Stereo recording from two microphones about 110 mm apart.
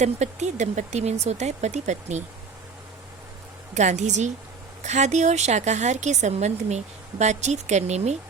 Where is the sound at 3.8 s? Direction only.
90° right.